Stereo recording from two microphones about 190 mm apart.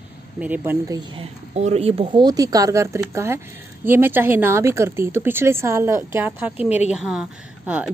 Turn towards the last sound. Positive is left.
turn(degrees=-5)  # may be behind; listen again after turning